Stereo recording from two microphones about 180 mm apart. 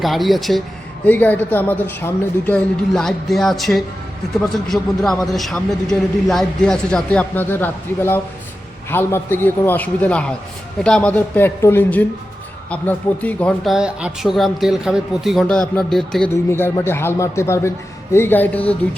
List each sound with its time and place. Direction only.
0.0 s a man's voice: centre (ahead or behind)
13.7 s a man's voice: 5° right (ahead or behind)
16.3 s speech: 15° left (ahead or behind)